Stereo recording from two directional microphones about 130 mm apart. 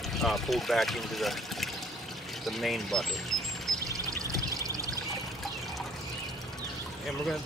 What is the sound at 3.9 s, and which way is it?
Music, 25° right (ahead or behind).